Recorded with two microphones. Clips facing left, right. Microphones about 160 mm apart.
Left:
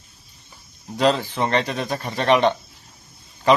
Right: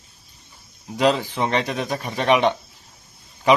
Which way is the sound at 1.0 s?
10° right (ahead or behind).